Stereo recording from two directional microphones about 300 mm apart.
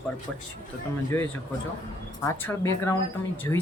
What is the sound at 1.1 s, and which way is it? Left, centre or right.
Speech, centre.